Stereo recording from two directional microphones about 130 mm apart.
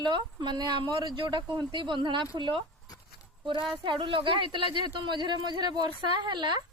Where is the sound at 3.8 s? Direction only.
40° right (ahead or behind).